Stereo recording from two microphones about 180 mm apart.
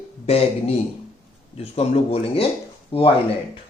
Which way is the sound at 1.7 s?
30° left (ahead or behind).